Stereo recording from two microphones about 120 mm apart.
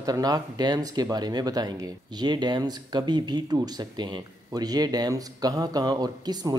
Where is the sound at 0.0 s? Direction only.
30° right (ahead or behind).